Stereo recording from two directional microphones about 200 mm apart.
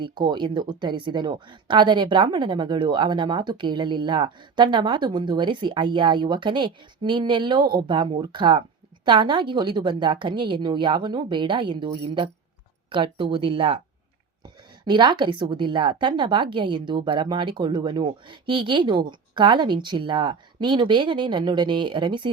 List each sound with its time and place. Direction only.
0.0 s speech: 20° right (ahead or behind)